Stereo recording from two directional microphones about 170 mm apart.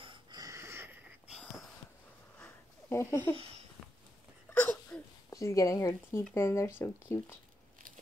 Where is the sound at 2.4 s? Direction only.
15° left (ahead or behind).